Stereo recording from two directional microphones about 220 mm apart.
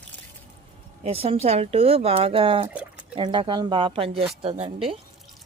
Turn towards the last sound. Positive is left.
turn(degrees=-25)  # may be behind; listen again after turning